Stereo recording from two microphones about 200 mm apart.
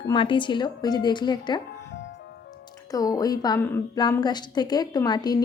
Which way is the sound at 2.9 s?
20° left (ahead or behind).